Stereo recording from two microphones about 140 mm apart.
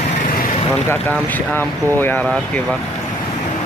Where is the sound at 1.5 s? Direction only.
15° left (ahead or behind).